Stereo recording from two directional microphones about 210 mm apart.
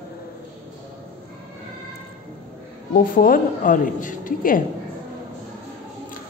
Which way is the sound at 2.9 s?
40° left (ahead or behind).